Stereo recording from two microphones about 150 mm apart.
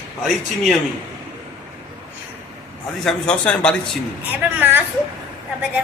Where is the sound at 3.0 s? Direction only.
5° left (ahead or behind).